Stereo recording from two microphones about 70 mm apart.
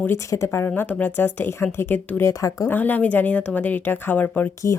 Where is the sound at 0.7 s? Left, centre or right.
Left.